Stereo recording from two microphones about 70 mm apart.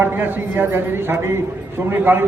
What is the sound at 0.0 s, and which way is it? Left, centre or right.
A man's voice, right.